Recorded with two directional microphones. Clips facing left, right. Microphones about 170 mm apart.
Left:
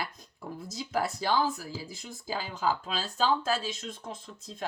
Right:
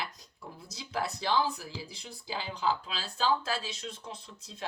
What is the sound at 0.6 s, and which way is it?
Speech, 45° left (ahead or behind).